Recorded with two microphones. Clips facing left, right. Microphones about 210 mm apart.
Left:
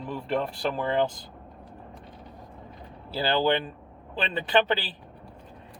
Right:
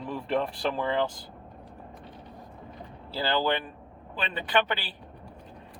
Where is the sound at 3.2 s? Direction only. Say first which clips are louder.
Left 3 dB; 20° left (ahead or behind).